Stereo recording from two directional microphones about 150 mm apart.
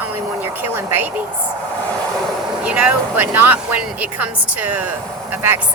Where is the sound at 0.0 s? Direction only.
15° right (ahead or behind).